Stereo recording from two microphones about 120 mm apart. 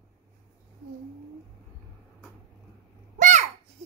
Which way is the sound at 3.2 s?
90° right.